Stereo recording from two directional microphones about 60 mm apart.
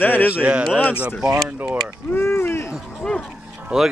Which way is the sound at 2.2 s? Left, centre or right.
Left.